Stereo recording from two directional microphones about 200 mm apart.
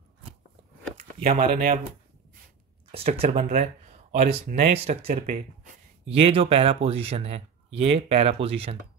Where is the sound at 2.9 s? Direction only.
30° right (ahead or behind).